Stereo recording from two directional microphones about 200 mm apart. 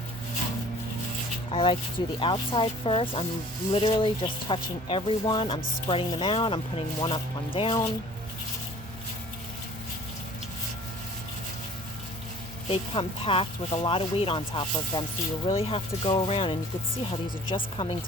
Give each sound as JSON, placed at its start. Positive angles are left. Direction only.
{"t": 1.5, "sound": "speech", "side_deg": 25}
{"t": 12.7, "sound": "speech", "side_deg": 25}